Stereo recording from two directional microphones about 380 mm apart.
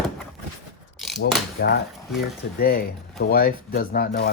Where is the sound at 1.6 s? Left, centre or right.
Left.